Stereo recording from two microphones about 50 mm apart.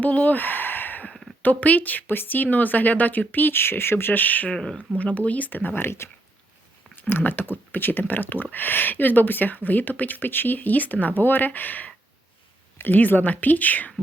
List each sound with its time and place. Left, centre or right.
0.0 s a sound: left
1.4 s speech: left
4.5 s speech: centre
4.9 s speech: left
7.1 s speech: left